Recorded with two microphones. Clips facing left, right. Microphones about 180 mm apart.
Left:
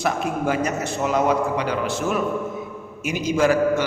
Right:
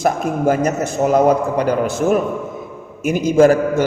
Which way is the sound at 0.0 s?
45° right (ahead or behind).